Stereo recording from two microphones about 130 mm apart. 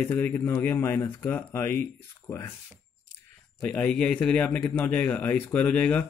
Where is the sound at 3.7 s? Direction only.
10° left (ahead or behind).